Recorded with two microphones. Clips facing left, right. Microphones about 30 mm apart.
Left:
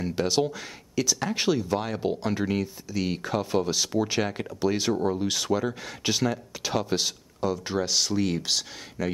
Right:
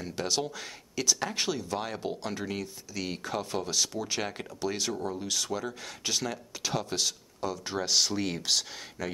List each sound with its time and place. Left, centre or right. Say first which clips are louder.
0.0 s speech: left 6 dB; centre
0.9 s speech: left 3 dB; centre
3.9 s speech: left 8 dB; left
4.2 s speech: left 7 dB; centre
7.8 s speech: left 1 dB; centre